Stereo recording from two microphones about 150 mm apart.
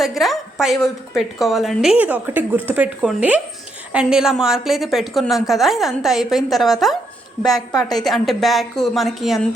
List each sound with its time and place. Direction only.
0.0 s a woman's voice: centre (ahead or behind)
7.5 s a woman's voice: 25° left (ahead or behind)
8.0 s a woman's voice: centre (ahead or behind)